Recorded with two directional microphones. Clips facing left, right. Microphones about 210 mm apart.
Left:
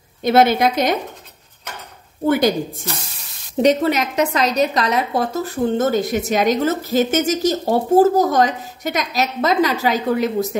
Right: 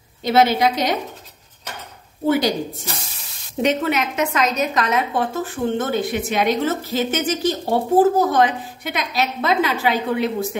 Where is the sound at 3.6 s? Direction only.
35° left (ahead or behind).